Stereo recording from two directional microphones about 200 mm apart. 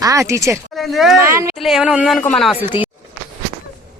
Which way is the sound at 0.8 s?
Centre (ahead or behind).